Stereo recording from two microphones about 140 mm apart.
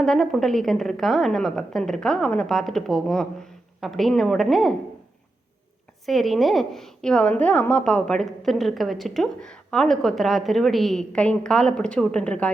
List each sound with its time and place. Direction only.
0.0 s a woman's voice: centre (ahead or behind)
6.1 s a woman's voice: centre (ahead or behind)